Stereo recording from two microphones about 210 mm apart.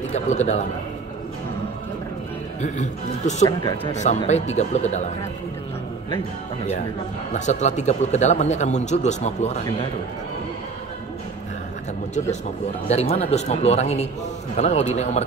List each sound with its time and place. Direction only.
0.1 s a man's voice: 35° left (ahead or behind)
2.6 s a man's voice: 35° left (ahead or behind)
7.3 s a man's voice: 35° left (ahead or behind)
12.8 s a man's voice: 30° left (ahead or behind)